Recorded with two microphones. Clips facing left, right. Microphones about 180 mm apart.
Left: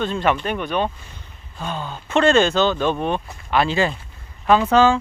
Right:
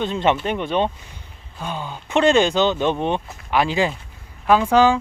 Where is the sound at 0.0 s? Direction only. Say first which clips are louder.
Right 1 dB; 20° right (ahead or behind).